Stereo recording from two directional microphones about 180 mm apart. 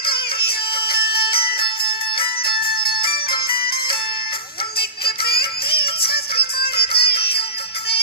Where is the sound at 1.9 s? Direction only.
30° left (ahead or behind).